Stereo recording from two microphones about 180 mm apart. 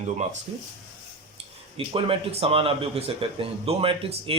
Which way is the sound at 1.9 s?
30° right (ahead or behind).